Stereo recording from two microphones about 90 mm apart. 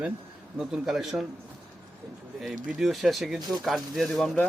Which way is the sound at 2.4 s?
5° right (ahead or behind).